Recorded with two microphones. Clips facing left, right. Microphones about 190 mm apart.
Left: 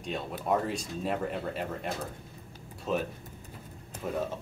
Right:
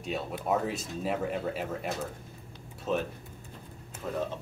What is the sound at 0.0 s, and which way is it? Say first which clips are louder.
Speech: right 1 dB; 5° right (ahead or behind).